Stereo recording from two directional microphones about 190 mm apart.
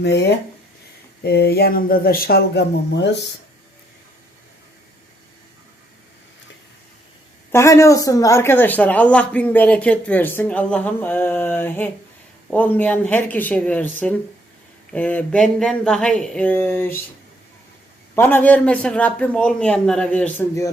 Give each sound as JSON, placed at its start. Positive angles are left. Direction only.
{"t": 0.0, "sound": "speech", "side_deg": 65}
{"t": 7.5, "sound": "speech", "side_deg": 15}
{"t": 18.1, "sound": "speech", "side_deg": 10}